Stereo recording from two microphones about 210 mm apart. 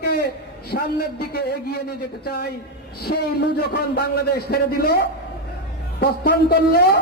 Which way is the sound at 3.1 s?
50° left (ahead or behind).